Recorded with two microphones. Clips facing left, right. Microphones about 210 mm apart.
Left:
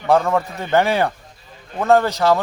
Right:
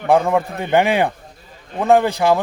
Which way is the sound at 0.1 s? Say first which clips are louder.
Right 1 dB; 15° right (ahead or behind).